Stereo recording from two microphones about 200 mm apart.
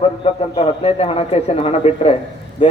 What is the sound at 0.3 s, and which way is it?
A man's voice, 30° left (ahead or behind).